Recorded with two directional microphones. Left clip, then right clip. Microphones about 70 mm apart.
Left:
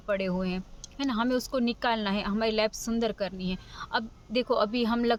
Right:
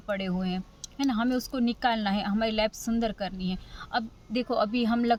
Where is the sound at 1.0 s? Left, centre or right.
Left.